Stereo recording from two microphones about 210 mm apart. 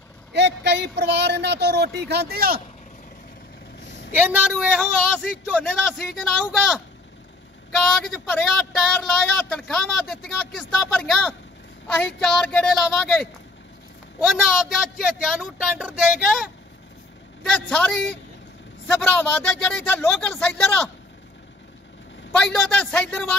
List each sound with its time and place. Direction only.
0.3 s speech: 55° right (ahead or behind)
4.2 s speech: 5° right (ahead or behind)
22.3 s speech: 5° left (ahead or behind)